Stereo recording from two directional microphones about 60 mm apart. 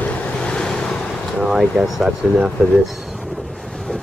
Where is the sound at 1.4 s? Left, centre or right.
Centre.